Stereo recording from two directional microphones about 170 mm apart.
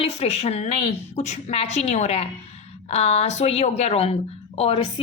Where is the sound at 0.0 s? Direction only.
35° left (ahead or behind).